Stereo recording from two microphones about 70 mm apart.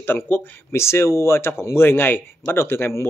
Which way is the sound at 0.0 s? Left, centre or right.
Left.